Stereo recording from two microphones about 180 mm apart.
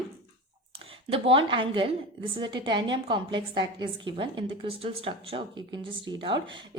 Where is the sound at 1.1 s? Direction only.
30° right (ahead or behind).